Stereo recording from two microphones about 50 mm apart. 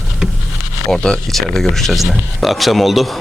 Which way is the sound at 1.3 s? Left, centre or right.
Centre.